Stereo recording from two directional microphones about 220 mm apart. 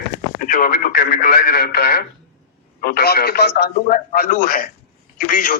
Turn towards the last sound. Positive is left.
turn(degrees=40)  # may be behind; listen again after turning